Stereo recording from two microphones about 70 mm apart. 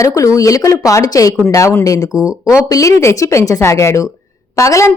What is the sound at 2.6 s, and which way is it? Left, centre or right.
Speech, left.